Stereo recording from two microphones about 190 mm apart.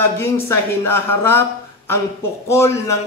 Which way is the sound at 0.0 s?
10° left (ahead or behind).